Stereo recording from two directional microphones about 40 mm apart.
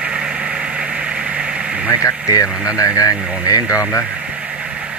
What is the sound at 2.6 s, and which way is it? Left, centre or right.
Radio, right.